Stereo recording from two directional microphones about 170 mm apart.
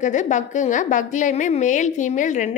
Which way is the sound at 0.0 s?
45° left (ahead or behind).